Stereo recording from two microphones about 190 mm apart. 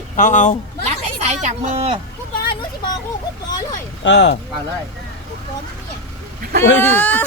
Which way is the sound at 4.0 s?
65° left (ahead or behind).